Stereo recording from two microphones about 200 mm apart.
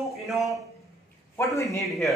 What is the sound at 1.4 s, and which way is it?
Speech, 15° left (ahead or behind).